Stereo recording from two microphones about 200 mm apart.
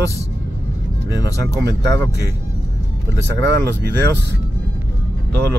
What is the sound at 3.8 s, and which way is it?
Speech, 55° right (ahead or behind).